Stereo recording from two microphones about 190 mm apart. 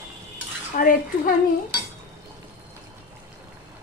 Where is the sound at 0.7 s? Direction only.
45° left (ahead or behind).